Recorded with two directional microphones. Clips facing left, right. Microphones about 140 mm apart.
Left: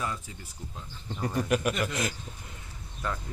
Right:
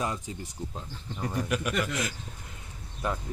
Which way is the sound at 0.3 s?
25° right (ahead or behind).